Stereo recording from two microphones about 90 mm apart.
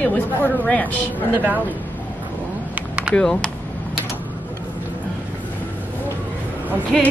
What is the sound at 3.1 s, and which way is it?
Speech, 10° left (ahead or behind).